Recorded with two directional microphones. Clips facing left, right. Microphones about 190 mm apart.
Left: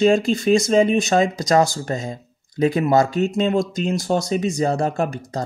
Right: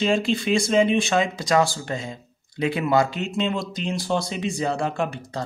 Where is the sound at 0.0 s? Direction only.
45° left (ahead or behind).